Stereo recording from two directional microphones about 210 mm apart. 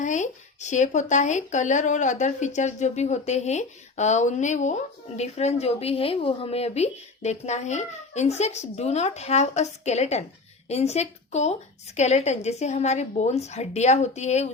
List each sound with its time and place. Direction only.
0.0 s speech: 35° left (ahead or behind)